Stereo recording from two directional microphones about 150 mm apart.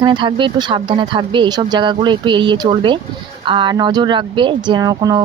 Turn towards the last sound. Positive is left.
turn(degrees=-25)  # may be behind; listen again after turning